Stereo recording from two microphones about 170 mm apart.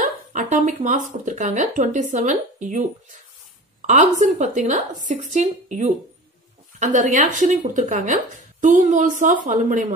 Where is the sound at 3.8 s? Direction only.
45° right (ahead or behind).